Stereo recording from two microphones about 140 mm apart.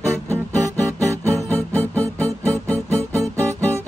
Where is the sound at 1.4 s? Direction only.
10° left (ahead or behind).